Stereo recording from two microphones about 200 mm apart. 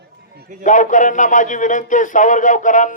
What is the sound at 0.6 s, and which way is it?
Speech, 40° left (ahead or behind).